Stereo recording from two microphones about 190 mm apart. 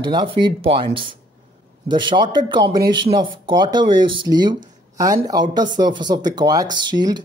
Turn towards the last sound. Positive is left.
turn(degrees=-20)  # may be behind; listen again after turning